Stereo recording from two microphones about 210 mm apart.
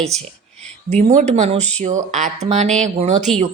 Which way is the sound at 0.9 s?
30° right (ahead or behind).